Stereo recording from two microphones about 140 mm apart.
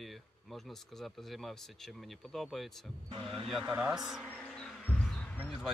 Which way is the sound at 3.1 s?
40° right (ahead or behind).